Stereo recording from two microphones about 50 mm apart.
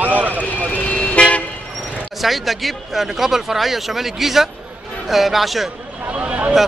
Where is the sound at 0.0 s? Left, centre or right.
Right.